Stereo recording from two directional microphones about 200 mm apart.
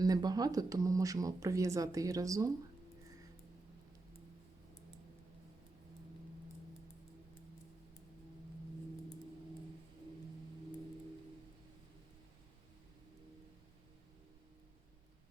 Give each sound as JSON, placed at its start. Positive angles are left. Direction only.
{"t": 0.0, "sound": "speech", "side_deg": -20}